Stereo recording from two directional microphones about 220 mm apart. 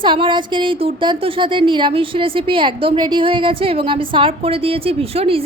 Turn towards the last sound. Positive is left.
turn(degrees=-25)  # may be behind; listen again after turning